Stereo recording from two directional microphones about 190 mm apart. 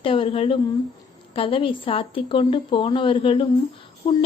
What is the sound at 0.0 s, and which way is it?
A woman's voice, 30° left (ahead or behind).